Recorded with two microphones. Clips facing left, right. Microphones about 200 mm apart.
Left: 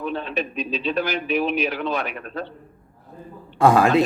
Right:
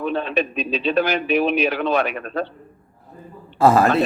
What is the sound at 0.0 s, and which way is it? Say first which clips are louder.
A man's voice: right 4 dB; 80° right.